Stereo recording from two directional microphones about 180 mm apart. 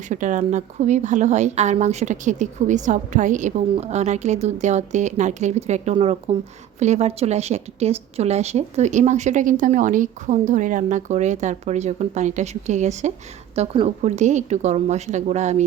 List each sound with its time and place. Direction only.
0.1 s a woman's voice: 45° right (ahead or behind)